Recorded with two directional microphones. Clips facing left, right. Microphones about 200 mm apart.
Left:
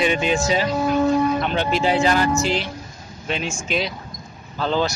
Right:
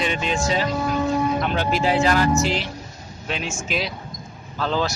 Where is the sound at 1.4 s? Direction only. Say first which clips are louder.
Left 1 dB; centre (ahead or behind).